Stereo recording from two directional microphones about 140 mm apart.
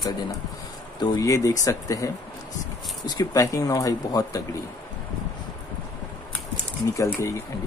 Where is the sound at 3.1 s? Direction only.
25° left (ahead or behind).